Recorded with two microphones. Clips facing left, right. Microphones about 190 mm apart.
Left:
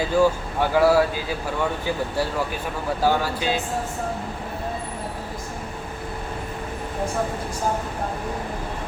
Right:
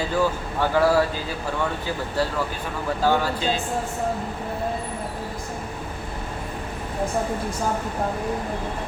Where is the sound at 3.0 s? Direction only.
10° left (ahead or behind).